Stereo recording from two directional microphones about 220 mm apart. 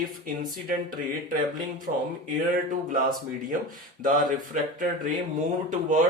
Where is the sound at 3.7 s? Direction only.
40° right (ahead or behind).